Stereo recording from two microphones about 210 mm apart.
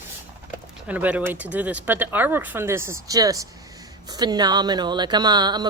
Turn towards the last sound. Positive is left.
turn(degrees=-20)  # may be behind; listen again after turning